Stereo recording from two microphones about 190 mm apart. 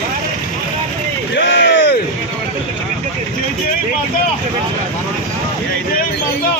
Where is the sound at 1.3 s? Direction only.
65° left (ahead or behind).